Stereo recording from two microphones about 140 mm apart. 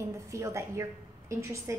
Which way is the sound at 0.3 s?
20° right (ahead or behind).